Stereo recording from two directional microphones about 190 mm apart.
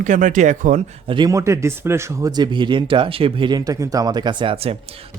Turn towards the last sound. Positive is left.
turn(degrees=-30)  # may be behind; listen again after turning